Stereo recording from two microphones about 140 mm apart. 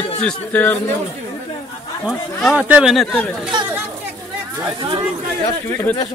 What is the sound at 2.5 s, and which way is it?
Speech, 5° right (ahead or behind).